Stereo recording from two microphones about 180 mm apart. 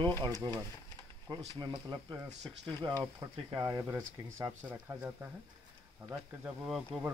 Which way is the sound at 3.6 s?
15° right (ahead or behind).